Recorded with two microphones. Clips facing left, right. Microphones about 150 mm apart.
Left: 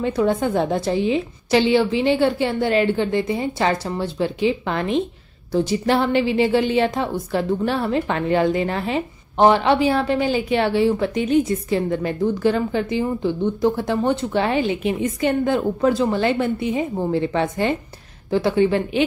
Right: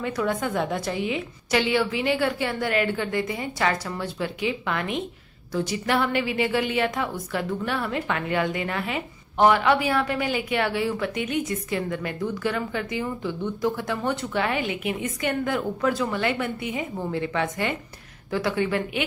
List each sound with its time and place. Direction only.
0.0 s a woman's voice: 30° left (ahead or behind)